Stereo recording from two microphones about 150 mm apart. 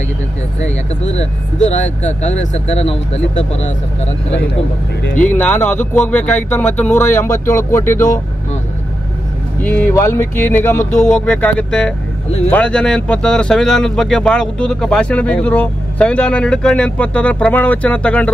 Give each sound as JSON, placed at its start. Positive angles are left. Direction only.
{"t": 1.0, "sound": "speech", "side_deg": 50}
{"t": 5.1, "sound": "speech", "side_deg": 10}
{"t": 9.6, "sound": "speech", "side_deg": 10}